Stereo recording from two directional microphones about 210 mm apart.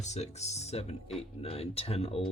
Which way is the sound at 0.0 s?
30° left (ahead or behind).